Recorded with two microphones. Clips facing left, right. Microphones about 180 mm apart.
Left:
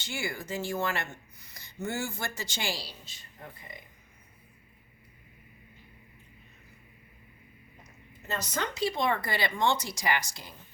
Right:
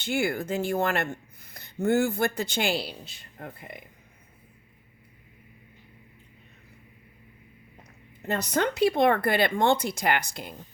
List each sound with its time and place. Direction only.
0.0 s speech: 55° right (ahead or behind)
8.2 s speech: 60° right (ahead or behind)